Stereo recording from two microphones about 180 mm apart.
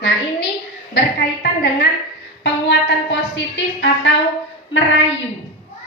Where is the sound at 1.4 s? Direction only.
65° left (ahead or behind).